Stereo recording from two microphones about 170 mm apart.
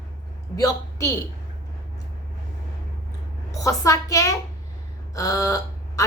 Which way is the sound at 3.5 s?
20° left (ahead or behind).